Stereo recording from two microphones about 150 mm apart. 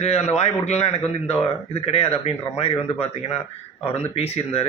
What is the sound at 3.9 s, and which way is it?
Speech, 45° left (ahead or behind).